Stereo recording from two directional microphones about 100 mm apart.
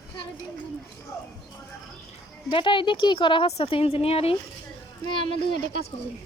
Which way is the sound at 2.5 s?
55° left (ahead or behind).